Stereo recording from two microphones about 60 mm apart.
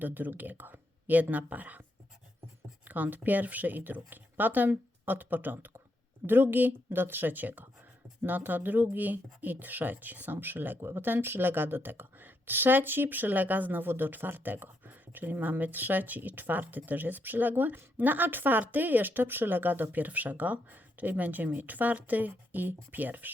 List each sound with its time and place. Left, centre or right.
0.0 s speech: right
2.8 s speech: right